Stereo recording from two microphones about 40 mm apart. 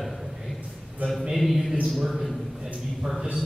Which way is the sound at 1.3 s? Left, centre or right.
Centre.